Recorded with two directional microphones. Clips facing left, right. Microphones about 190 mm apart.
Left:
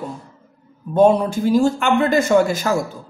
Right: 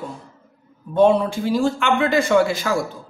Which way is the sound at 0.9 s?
45° left (ahead or behind).